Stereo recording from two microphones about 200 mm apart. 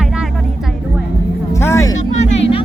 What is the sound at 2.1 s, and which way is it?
Speech, 30° left (ahead or behind).